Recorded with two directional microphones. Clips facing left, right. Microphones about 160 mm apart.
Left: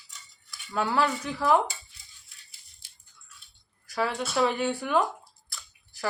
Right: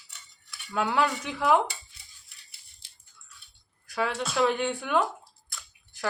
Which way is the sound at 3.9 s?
Centre (ahead or behind).